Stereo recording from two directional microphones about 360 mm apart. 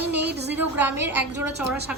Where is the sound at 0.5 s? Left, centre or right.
Centre.